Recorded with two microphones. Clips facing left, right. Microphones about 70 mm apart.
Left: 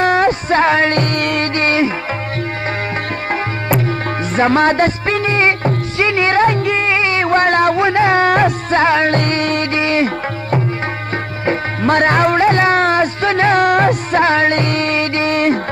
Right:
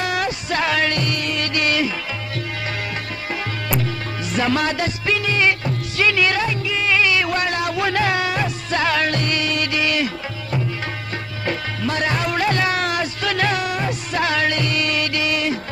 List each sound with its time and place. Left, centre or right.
0.0 s music: left
1.5 s music: left
3.3 s music: left
6.4 s music: left
6.9 s a sound: left
7.8 s music: left
9.2 s music: left
11.8 s music: left
12.4 s music: left
13.6 s music: left